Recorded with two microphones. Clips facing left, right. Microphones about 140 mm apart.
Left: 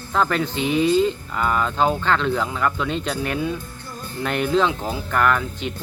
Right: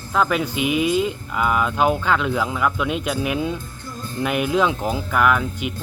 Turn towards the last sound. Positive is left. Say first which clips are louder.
# right 1 dB
turn(degrees=-10)  # may be behind; listen again after turning